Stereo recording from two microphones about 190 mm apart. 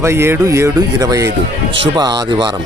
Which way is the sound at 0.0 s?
15° right (ahead or behind).